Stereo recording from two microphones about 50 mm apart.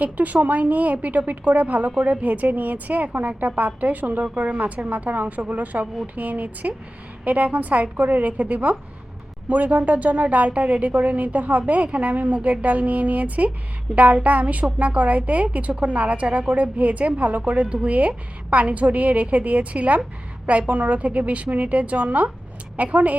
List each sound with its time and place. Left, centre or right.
0.0 s a woman's voice: right